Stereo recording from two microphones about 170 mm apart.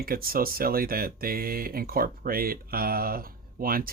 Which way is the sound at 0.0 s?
60° right (ahead or behind).